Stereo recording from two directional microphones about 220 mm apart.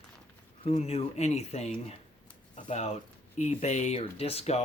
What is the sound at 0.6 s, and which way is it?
Speech, 25° left (ahead or behind).